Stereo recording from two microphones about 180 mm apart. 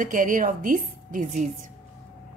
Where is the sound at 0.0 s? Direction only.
45° right (ahead or behind).